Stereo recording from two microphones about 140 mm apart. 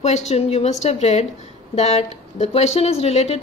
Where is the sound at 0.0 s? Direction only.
55° left (ahead or behind).